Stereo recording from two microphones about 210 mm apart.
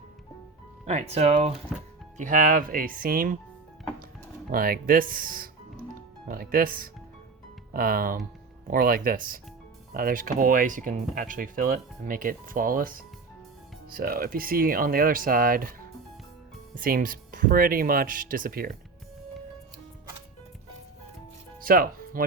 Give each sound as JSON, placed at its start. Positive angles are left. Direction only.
{"t": 0.9, "sound": "speech", "side_deg": -30}
{"t": 4.4, "sound": "speech", "side_deg": -45}
{"t": 16.7, "sound": "speech", "side_deg": -40}
{"t": 21.6, "sound": "music", "side_deg": -45}